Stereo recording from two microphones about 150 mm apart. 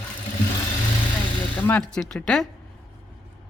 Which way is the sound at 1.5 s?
10° left (ahead or behind).